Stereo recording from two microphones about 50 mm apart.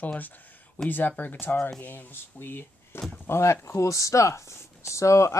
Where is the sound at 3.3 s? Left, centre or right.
Left.